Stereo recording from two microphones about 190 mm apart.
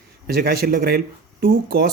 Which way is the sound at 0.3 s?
55° right (ahead or behind).